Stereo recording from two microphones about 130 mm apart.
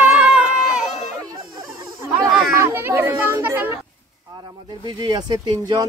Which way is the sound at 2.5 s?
20° right (ahead or behind).